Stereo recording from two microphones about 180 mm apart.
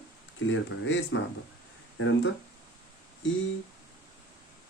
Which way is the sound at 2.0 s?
90° left.